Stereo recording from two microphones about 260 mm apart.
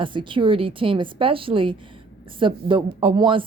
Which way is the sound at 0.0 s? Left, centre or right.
Centre.